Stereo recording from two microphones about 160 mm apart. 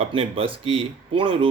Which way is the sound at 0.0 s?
35° right (ahead or behind).